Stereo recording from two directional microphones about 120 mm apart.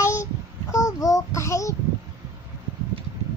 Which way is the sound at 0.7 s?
30° left (ahead or behind).